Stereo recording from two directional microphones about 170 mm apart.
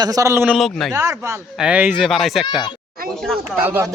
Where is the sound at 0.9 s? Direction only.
20° right (ahead or behind); by 3.6 s centre (ahead or behind).